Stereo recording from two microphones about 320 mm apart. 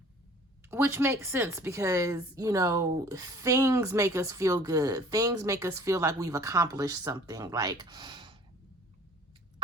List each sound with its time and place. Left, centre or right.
0.7 s a woman's voice: centre